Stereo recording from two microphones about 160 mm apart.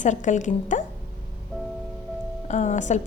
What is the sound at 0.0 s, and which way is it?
Speech, 50° left (ahead or behind).